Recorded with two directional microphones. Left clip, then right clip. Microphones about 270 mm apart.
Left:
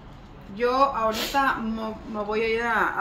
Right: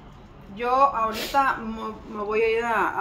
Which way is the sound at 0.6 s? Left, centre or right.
Centre.